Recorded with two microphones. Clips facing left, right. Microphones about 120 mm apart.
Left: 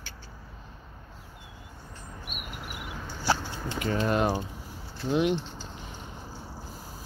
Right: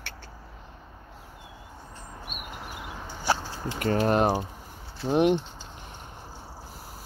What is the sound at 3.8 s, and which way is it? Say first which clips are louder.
Speech: right 3 dB; 45° right (ahead or behind).